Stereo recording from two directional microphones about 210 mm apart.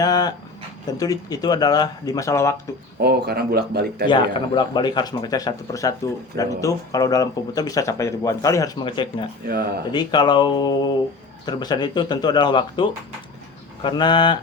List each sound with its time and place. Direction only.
0.0 s speech: 20° left (ahead or behind)
3.0 s speech: 50° right (ahead or behind)
4.0 s speech: 20° left (ahead or behind)
9.5 s speech: 50° right (ahead or behind)
9.9 s speech: 20° left (ahead or behind)